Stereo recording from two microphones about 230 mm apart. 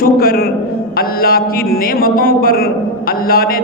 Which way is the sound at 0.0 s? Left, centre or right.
Left.